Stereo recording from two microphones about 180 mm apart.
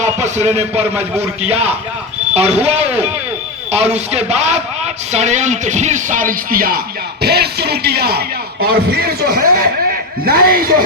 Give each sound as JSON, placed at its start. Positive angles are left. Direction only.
{"t": 0.0, "sound": "a sound", "side_deg": -40}
{"t": 0.9, "sound": "a man's voice", "side_deg": -15}
{"t": 1.4, "sound": "a man's voice", "side_deg": -35}